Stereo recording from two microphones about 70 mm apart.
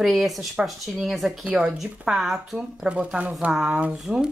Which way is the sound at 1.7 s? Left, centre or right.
Centre.